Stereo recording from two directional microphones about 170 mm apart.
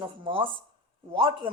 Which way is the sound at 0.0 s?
30° right (ahead or behind).